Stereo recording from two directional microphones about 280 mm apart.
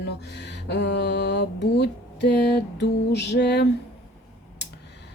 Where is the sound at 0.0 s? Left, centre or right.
Left.